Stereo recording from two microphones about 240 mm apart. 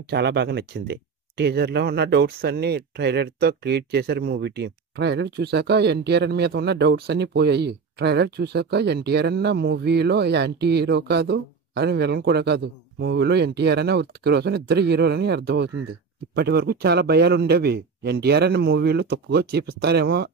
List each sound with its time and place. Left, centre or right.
0.1 s speech: right